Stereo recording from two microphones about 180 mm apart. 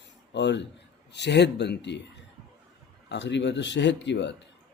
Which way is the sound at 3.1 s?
80° left.